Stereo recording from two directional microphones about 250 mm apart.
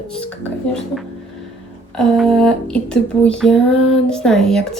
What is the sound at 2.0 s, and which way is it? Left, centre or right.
Speech, centre.